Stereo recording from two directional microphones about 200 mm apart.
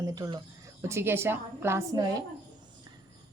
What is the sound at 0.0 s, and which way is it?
A woman's voice, 20° right (ahead or behind).